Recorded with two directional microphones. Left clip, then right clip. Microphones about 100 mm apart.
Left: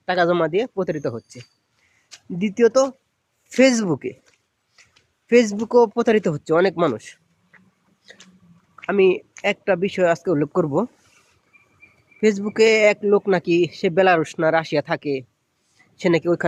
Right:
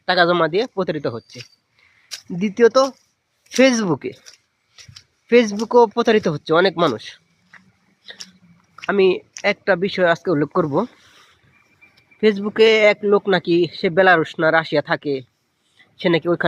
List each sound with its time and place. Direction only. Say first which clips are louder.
0.0 s speech: right 3 dB; 5° left (ahead or behind)
5.3 s speech: right 2 dB; 10° left (ahead or behind)
8.1 s biting: right 7 dB; 20° left (ahead or behind)
8.9 s speech: right 1 dB; 10° left (ahead or behind)
12.2 s speech: right 2 dB; 10° left (ahead or behind)